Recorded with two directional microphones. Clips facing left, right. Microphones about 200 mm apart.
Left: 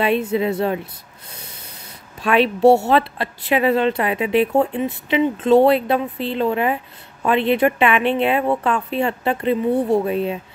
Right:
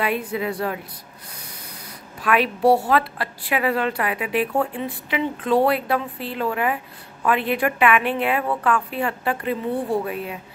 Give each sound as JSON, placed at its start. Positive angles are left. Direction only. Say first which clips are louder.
{"t": 0.0, "sound": "a woman's voice", "louder": "left 6 dB", "side_deg": 25}
{"t": 2.2, "sound": "a woman's voice", "louder": "left 4 dB", "side_deg": 25}